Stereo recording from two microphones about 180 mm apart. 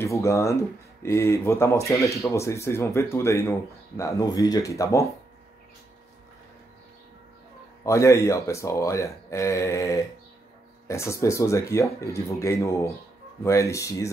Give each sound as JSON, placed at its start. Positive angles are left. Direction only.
{"t": 0.0, "sound": "speech", "side_deg": 15}
{"t": 7.8, "sound": "speech", "side_deg": 15}